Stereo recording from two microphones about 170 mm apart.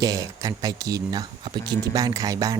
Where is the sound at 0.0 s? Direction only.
20° right (ahead or behind).